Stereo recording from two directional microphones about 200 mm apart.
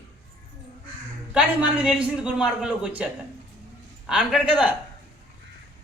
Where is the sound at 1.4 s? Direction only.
5° right (ahead or behind).